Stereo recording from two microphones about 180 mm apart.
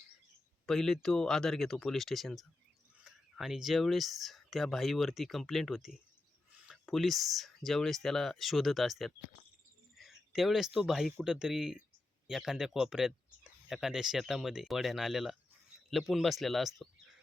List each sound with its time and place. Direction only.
0.6 s speech: centre (ahead or behind)